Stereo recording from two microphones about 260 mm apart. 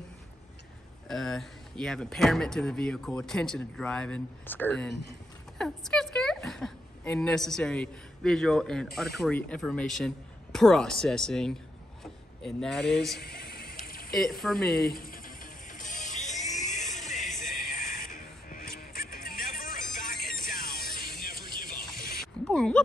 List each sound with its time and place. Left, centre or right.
1.0 s a woman's voice: centre
13.2 s music: left
13.8 s mechanisms: left
14.4 s speech: centre
14.9 s mechanisms: left
15.8 s music: left
22.5 s a sound: centre